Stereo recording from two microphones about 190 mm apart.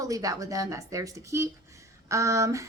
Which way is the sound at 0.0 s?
20° right (ahead or behind).